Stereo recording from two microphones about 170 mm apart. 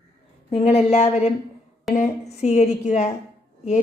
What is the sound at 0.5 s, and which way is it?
A woman's voice, 35° left (ahead or behind).